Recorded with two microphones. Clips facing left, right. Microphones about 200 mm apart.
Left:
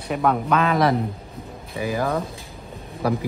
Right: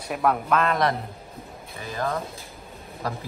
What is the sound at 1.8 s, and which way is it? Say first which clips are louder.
Speech: left 5 dB; 15° left (ahead or behind).